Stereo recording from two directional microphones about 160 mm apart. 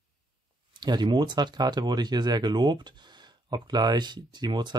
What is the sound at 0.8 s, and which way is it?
Speech, 25° right (ahead or behind).